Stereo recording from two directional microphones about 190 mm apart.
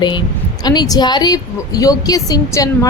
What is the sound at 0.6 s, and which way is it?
A woman's voice, 20° left (ahead or behind).